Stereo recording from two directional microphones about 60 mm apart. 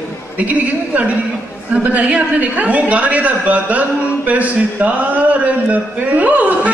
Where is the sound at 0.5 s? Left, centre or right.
Right.